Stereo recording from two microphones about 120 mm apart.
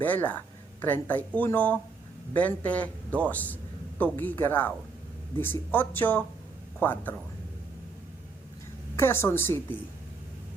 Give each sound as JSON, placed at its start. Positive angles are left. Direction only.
{"t": 0.0, "sound": "a man's voice", "side_deg": 15}
{"t": 9.0, "sound": "a woman's voice", "side_deg": 20}